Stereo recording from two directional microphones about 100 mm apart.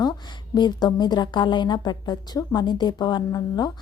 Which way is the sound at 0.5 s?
45° left (ahead or behind).